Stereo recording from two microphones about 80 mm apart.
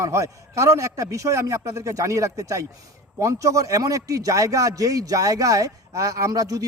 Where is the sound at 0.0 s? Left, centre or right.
Right.